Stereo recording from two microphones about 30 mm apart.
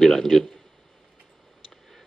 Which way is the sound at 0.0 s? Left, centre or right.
Centre.